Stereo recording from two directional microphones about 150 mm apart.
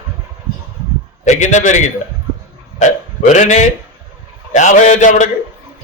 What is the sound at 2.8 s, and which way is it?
Speech, 50° left (ahead or behind).